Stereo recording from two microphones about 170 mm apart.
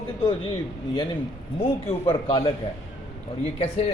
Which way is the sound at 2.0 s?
30° left (ahead or behind).